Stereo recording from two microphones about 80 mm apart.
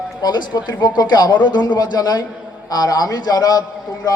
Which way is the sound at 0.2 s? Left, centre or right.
Left.